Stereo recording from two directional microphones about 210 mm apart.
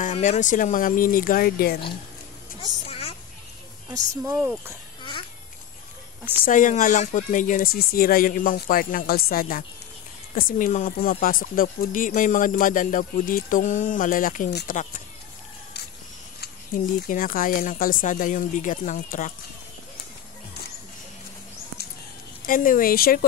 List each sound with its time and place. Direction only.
0.0 s speech: 35° left (ahead or behind)
2.6 s a sound: 30° left (ahead or behind)
3.9 s speech: 15° right (ahead or behind)
6.4 s speech: 40° left (ahead or behind)
16.3 s speech: 45° left (ahead or behind)
22.5 s speech: 40° left (ahead or behind)